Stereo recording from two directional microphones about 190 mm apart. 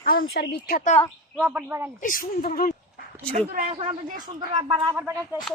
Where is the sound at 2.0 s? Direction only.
45° left (ahead or behind).